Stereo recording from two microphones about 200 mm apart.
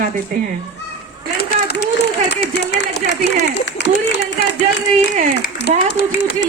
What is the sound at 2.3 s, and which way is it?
Speech, 60° left (ahead or behind).